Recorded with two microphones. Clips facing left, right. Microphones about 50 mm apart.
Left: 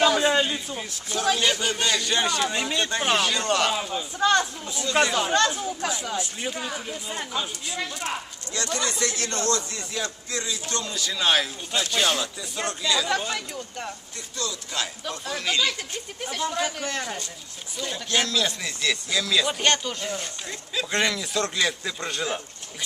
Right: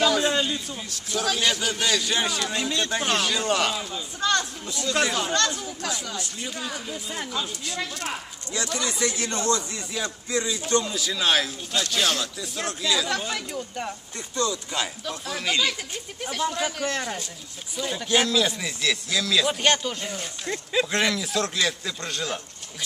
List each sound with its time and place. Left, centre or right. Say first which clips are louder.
0.0 s a sound: left 2 dB; centre
1.1 s a man's voice: left 1 dB; centre
2.5 s a man's voice: even; centre
3.7 s a man's voice: left 3 dB; centre
5.0 s speech: left 1 dB; centre
5.3 s a man's voice: left 3 dB; centre
8.5 s speech: even; centre
10.8 s speech: even; centre
14.3 s speech: right 6 dB; right
15.1 s speech: even; centre